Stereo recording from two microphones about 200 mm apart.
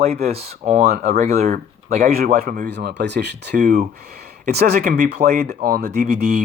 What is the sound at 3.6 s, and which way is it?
Speech, 45° right (ahead or behind).